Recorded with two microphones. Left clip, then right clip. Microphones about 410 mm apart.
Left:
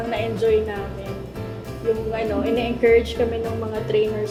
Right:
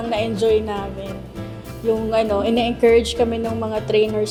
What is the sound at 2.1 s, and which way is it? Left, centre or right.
Speech, right.